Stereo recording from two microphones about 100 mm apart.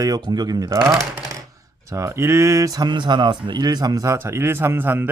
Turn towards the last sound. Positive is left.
turn(degrees=-20)  # may be behind; listen again after turning